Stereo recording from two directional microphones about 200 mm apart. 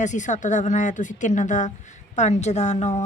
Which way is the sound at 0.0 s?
40° left (ahead or behind).